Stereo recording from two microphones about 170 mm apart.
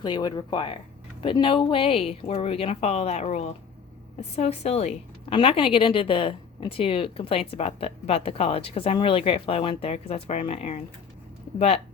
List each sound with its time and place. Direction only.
0.0 s a woman's voice: 25° left (ahead or behind)